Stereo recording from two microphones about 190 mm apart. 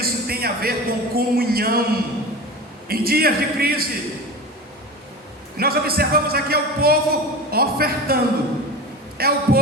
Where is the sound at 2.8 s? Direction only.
50° right (ahead or behind).